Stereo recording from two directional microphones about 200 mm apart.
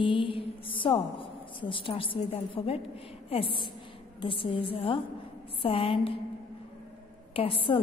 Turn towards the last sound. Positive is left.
turn(degrees=25)  # may be behind; listen again after turning